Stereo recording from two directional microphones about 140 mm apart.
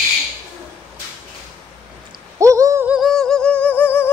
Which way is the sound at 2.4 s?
20° right (ahead or behind).